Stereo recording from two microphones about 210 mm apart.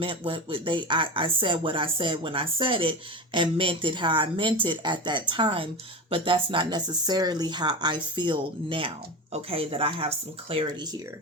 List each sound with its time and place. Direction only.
0.0 s speech: 25° right (ahead or behind)